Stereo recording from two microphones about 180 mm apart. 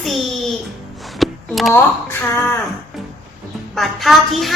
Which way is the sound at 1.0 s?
Centre (ahead or behind).